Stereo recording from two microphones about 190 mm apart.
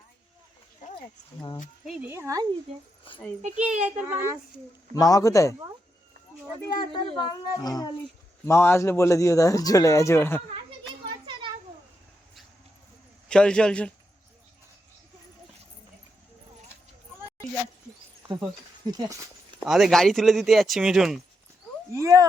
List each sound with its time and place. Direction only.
1.8 s speech: centre (ahead or behind)
2.0 s speech: 15° right (ahead or behind)
3.1 s speech: 25° left (ahead or behind)
3.8 s speech: 15° right (ahead or behind)
4.9 s speech: 20° left (ahead or behind)
6.7 s speech: 25° left (ahead or behind)
11.3 s a sound: 25° right (ahead or behind)
13.2 s speech: 5° left (ahead or behind)
18.9 s speech: 20° right (ahead or behind)
19.5 s speech: centre (ahead or behind)
21.9 s speech: 15° right (ahead or behind)